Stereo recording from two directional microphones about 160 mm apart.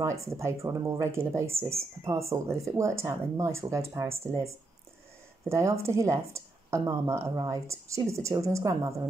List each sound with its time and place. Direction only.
0.0 s speech: 20° right (ahead or behind)